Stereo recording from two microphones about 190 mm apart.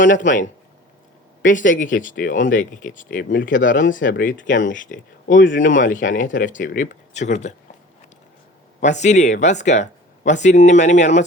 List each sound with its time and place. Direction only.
0.0 s speech: 45° left (ahead or behind)
8.8 s speech: 40° left (ahead or behind)